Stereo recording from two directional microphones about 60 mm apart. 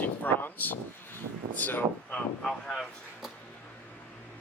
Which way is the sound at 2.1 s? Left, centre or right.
Centre.